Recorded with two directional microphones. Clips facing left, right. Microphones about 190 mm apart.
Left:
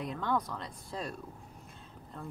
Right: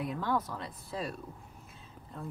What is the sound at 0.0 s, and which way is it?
A woman's voice, 5° right (ahead or behind).